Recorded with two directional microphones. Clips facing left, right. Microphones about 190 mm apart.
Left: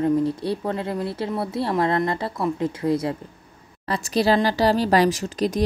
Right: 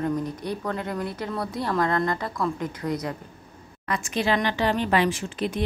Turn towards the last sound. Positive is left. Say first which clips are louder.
# left 5 dB
turn(degrees=40)  # may be behind; listen again after turning